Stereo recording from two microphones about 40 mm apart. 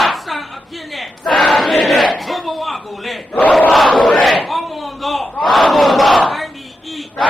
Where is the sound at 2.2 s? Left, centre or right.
Centre.